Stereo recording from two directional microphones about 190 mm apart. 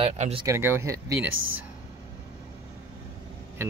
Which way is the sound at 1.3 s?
90° right.